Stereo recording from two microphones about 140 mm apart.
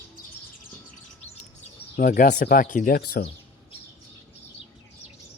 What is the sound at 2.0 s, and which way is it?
Speech, 70° left (ahead or behind).